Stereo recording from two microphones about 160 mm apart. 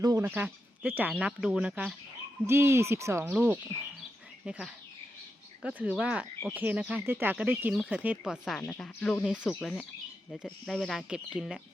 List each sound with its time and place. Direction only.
0.0 s a sound: 20° right (ahead or behind)
0.3 s speech: 10° right (ahead or behind)
2.5 s speech: 15° right (ahead or behind); by 9.2 s 10° left (ahead or behind)
9.2 s speech: 5° right (ahead or behind)